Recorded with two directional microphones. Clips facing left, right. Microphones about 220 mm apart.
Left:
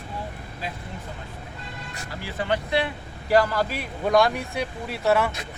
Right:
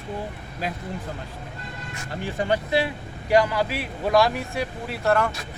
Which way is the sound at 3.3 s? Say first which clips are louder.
Right 1 dB; 15° right (ahead or behind).